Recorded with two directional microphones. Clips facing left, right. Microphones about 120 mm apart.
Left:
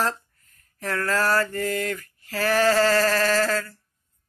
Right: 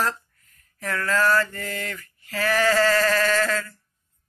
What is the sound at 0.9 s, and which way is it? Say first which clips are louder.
Mantra: right 1 dB; 40° left (ahead or behind).